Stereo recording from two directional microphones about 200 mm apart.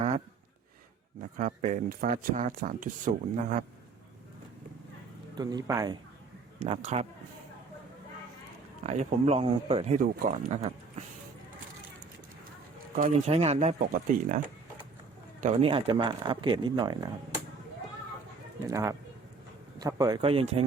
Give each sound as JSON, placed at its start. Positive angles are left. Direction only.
{"t": 1.4, "sound": "speech", "side_deg": -35}
{"t": 5.3, "sound": "speech", "side_deg": -20}
{"t": 6.6, "sound": "speech", "side_deg": -30}
{"t": 8.8, "sound": "speech", "side_deg": -30}
{"t": 10.0, "sound": "speech", "side_deg": -40}
{"t": 13.0, "sound": "speech", "side_deg": -30}
{"t": 18.7, "sound": "speech", "side_deg": -15}